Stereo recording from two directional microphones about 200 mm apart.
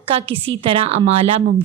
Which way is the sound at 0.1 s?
25° right (ahead or behind).